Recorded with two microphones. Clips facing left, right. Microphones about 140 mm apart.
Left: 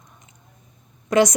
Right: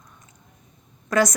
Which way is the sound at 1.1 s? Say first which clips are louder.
Left 3 dB; 20° left (ahead or behind).